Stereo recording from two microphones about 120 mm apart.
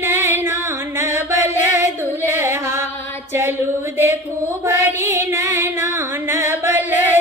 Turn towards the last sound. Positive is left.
turn(degrees=-15)  # may be behind; listen again after turning